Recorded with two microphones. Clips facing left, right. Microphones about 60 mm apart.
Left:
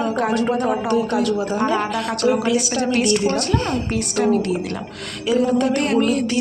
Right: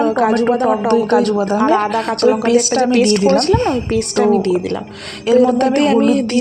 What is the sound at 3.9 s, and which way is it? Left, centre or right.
A woman's voice, right.